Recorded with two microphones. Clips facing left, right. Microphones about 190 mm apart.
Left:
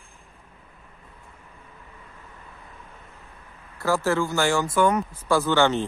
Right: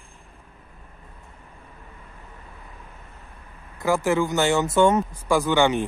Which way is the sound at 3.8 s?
15° right (ahead or behind).